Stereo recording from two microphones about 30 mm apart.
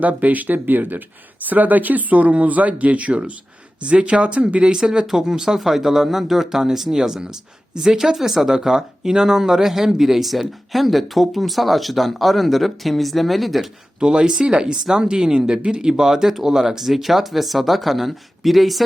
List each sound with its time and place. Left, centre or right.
0.2 s speech: right
2.3 s speech: right
4.8 s speech: right; by 13.7 s centre
14.0 s speech: right; by 18.9 s centre